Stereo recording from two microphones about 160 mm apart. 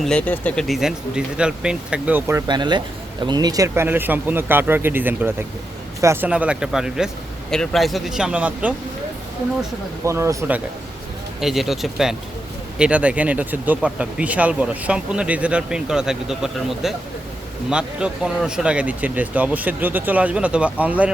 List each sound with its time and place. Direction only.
0.0 s speech: 5° left (ahead or behind); by 2.4 s 15° right (ahead or behind)
2.5 s speech: 30° right (ahead or behind); by 8.7 s 10° right (ahead or behind)
10.0 s speech: 15° right (ahead or behind)
11.3 s speech: centre (ahead or behind)